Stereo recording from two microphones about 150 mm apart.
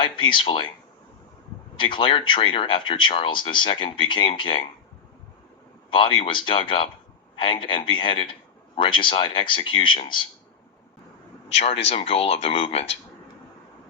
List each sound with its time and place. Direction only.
0.0 s speech: 35° left (ahead or behind)
1.7 s speech: 35° left (ahead or behind)
5.9 s speech: 35° left (ahead or behind)
11.4 s speech: 40° left (ahead or behind)